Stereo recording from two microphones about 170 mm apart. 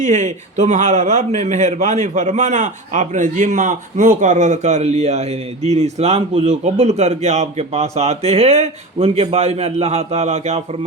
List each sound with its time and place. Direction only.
0.0 s a man's voice: 45° right (ahead or behind)